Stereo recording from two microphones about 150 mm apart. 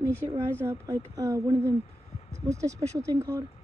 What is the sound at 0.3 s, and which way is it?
Speech, 15° right (ahead or behind).